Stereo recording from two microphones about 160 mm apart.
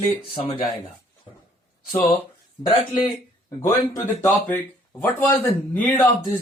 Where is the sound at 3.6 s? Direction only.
15° left (ahead or behind).